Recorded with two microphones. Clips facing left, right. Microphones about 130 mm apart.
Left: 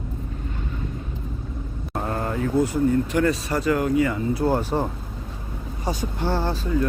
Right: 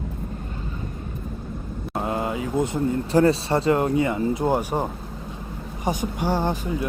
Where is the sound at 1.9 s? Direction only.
10° right (ahead or behind).